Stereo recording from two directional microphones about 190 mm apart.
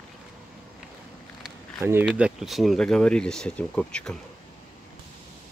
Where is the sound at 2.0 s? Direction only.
Centre (ahead or behind).